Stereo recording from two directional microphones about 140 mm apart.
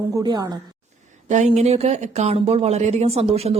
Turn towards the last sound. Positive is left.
turn(degrees=-45)  # may be behind; listen again after turning